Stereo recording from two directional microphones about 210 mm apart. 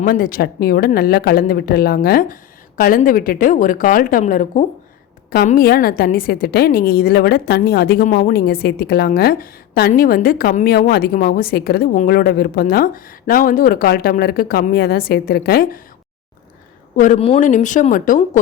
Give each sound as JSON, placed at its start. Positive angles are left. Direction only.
{"t": 0.0, "sound": "a woman's voice", "side_deg": 45}
{"t": 17.0, "sound": "speech", "side_deg": 30}